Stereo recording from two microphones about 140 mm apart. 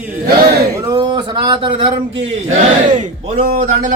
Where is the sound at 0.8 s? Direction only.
30° right (ahead or behind).